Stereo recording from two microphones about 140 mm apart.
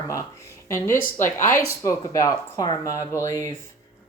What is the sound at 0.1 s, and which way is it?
Speech, 20° left (ahead or behind).